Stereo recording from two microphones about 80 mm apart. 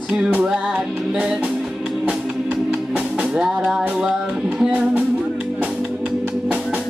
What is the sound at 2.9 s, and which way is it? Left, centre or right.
Music, centre.